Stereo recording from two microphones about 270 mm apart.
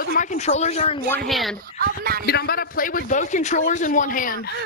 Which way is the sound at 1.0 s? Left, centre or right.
Centre.